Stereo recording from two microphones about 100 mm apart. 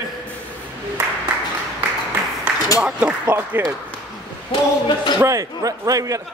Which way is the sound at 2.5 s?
15° right (ahead or behind).